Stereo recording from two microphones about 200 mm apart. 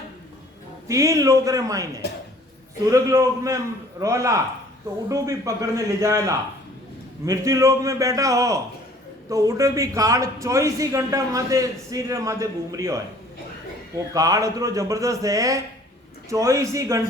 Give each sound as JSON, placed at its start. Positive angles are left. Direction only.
{"t": 0.9, "sound": "a man's voice", "side_deg": -15}
{"t": 2.9, "sound": "a man's voice", "side_deg": -15}
{"t": 14.1, "sound": "a man's voice", "side_deg": -15}